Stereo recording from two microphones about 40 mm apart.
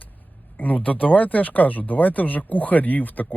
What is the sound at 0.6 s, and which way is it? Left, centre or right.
Speech, left.